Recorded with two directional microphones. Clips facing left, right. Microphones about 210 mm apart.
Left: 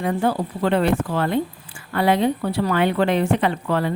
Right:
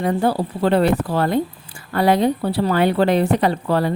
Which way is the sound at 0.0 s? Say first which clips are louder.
Right 2 dB; 35° right (ahead or behind).